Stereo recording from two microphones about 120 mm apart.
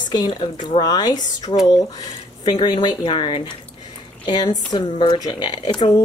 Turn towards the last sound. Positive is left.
turn(degrees=40)  # may be behind; listen again after turning